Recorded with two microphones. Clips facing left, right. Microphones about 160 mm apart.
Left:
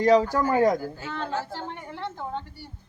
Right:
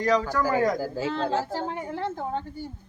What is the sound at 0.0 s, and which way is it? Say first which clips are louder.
Speech: left 4 dB; 30° left (ahead or behind).